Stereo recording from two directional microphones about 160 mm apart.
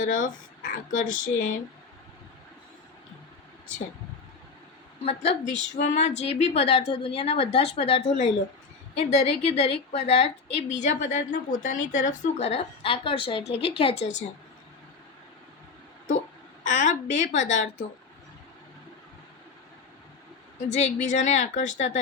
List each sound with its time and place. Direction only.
0.0 s speech: 55° left (ahead or behind)
5.0 s a woman's voice: 40° left (ahead or behind)
16.6 s a woman's voice: 50° left (ahead or behind)
20.7 s a woman's voice: 45° left (ahead or behind)